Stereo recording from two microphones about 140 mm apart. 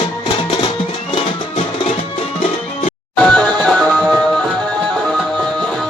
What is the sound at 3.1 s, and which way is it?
Music, 5° left (ahead or behind).